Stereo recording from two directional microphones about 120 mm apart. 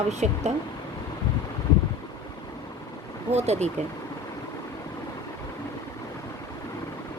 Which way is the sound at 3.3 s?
65° right (ahead or behind).